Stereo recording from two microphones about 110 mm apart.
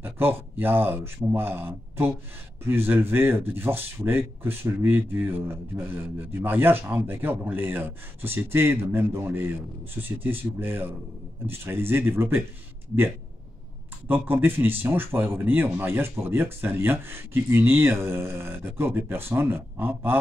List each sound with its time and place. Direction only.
0.0 s speech: 20° right (ahead or behind)
14.0 s speech: 20° right (ahead or behind)